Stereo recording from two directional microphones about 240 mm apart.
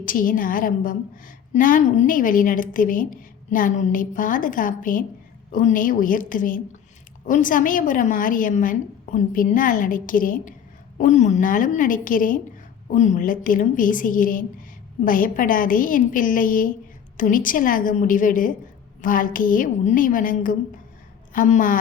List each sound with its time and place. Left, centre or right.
0.0 s a woman's voice: left